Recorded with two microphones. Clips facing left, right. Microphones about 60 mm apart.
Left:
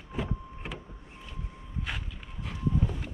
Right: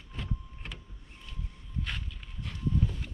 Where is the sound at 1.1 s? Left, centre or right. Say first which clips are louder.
Left 2 dB; centre.